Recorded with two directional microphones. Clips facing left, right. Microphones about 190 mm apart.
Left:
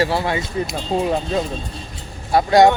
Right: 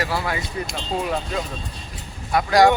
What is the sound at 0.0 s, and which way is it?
Speech, 25° left (ahead or behind).